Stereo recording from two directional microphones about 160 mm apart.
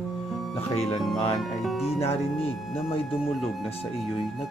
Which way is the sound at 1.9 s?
35° left (ahead or behind).